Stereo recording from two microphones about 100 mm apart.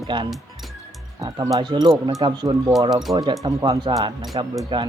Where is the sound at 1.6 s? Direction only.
50° right (ahead or behind).